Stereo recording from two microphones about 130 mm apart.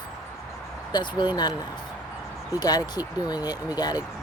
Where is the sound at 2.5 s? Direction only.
30° left (ahead or behind).